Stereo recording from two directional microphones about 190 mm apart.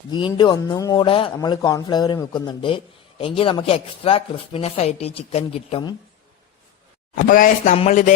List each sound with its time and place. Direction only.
0.1 s speech: 25° left (ahead or behind)
7.3 s speech: 45° left (ahead or behind)